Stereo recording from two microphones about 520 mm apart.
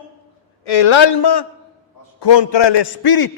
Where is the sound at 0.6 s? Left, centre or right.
Left.